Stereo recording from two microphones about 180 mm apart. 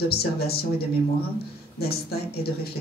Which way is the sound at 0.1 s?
60° left (ahead or behind).